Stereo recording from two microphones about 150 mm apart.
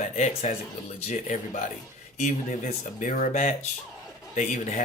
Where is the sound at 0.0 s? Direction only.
55° left (ahead or behind).